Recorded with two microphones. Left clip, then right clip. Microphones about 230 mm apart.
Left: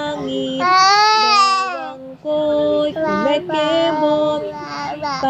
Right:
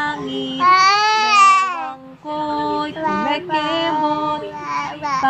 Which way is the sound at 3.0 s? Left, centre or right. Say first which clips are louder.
Left 2 dB; centre.